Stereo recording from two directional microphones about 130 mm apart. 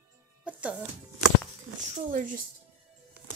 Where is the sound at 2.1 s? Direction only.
90° right.